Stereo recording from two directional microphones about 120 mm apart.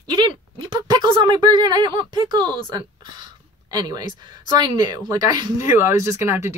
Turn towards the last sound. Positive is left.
turn(degrees=-25)  # may be behind; listen again after turning